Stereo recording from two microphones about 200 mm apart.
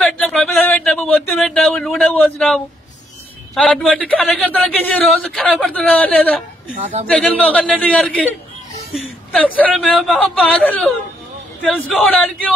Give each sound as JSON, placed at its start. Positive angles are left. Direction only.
{"t": 0.0, "sound": "a sound", "side_deg": 5}
{"t": 3.5, "sound": "speech", "side_deg": 5}
{"t": 6.7, "sound": "a man's voice", "side_deg": -35}
{"t": 7.1, "sound": "speech", "side_deg": 5}
{"t": 8.9, "sound": "a sound", "side_deg": 0}
{"t": 9.6, "sound": "speech", "side_deg": 5}